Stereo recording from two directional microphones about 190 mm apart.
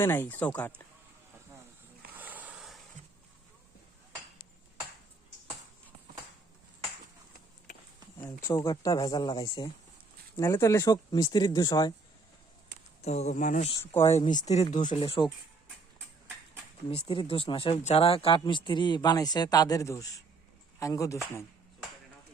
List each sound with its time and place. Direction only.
0.0 s speech: 10° left (ahead or behind)
2.2 s a sound: 10° right (ahead or behind)
8.2 s speech: 20° left (ahead or behind)
13.0 s speech: 35° left (ahead or behind)
13.7 s speech: 15° left (ahead or behind)
14.1 s speech: 40° left (ahead or behind)
16.9 s speech: 30° left (ahead or behind)